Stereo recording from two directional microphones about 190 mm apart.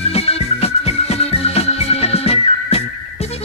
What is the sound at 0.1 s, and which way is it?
Music, 30° left (ahead or behind).